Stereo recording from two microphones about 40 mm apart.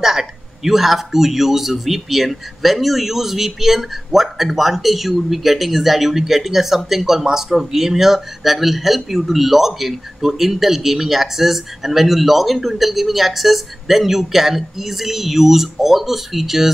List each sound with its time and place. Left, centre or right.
0.0 s speech: centre